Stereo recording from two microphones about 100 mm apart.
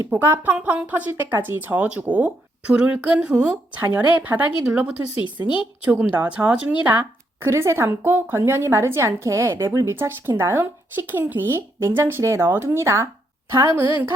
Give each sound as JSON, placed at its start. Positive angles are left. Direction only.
{"t": 0.1, "sound": "a woman's voice", "side_deg": -20}